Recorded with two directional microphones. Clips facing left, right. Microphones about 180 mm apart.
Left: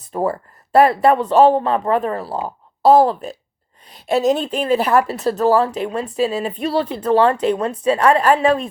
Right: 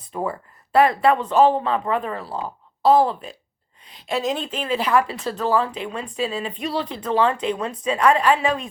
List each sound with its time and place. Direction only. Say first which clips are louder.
0.1 s speech: left 6 dB; 40° left (ahead or behind)